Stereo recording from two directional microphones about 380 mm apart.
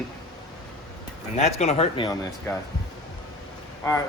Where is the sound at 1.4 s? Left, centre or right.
Centre.